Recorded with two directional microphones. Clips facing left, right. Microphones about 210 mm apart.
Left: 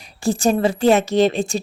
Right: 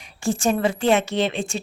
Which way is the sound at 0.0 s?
35° left (ahead or behind).